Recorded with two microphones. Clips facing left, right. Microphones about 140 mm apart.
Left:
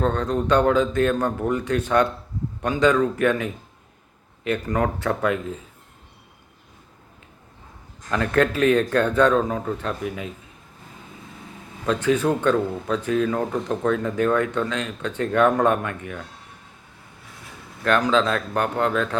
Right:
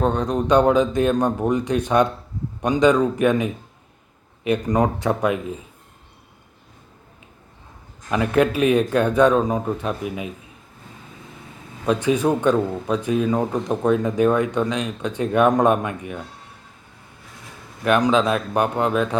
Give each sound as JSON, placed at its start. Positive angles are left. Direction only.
{"t": 0.0, "sound": "speech", "side_deg": -15}
{"t": 8.1, "sound": "speech", "side_deg": -15}
{"t": 11.9, "sound": "speech", "side_deg": -15}
{"t": 17.8, "sound": "speech", "side_deg": -15}